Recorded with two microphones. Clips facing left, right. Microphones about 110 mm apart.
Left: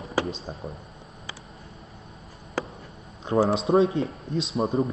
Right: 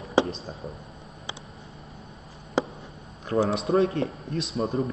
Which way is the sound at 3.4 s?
30° left (ahead or behind).